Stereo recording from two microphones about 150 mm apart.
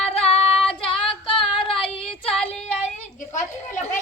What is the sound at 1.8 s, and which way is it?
Child singing, 40° left (ahead or behind).